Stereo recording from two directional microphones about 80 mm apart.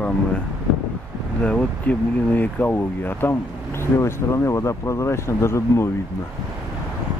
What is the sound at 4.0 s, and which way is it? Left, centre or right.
Speech, left.